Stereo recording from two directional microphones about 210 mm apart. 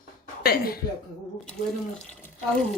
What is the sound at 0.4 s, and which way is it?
Speech, 45° left (ahead or behind).